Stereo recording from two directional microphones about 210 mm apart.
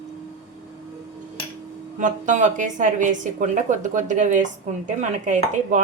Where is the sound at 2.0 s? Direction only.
35° right (ahead or behind).